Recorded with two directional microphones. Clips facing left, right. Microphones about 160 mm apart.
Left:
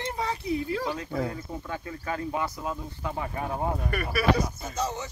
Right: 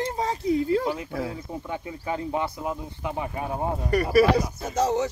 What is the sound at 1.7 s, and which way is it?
Speech, 20° right (ahead or behind).